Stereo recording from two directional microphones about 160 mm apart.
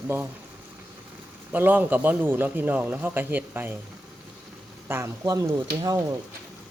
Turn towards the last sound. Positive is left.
turn(degrees=-25)  # may be behind; listen again after turning